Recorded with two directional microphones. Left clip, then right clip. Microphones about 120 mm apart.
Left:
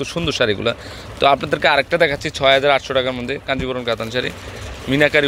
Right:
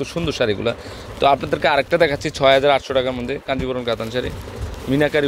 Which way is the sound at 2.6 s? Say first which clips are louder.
Even; 20° right (ahead or behind).